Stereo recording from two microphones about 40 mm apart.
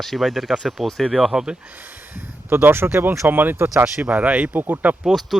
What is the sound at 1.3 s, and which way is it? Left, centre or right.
Speech, right.